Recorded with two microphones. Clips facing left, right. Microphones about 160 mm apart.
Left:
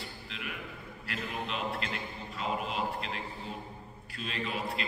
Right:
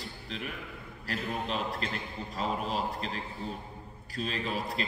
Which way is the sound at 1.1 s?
40° right (ahead or behind).